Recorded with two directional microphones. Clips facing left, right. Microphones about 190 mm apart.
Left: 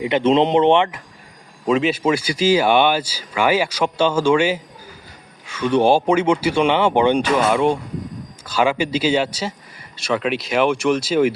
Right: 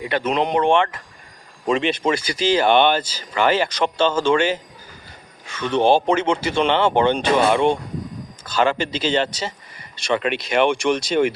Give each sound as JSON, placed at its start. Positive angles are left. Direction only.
{"t": 0.0, "sound": "speech", "side_deg": 25}
{"t": 1.6, "sound": "speech", "side_deg": 5}